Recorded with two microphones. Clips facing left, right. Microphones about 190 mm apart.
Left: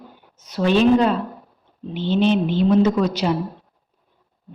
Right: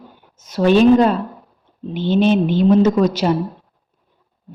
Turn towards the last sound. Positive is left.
turn(degrees=-45)  # may be behind; listen again after turning